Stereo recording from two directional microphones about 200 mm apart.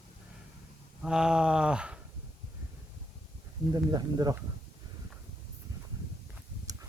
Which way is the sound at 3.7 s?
20° right (ahead or behind).